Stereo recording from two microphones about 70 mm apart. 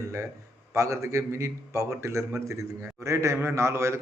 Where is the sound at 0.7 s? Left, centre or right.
Right.